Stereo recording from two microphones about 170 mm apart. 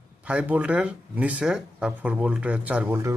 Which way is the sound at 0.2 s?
5° right (ahead or behind).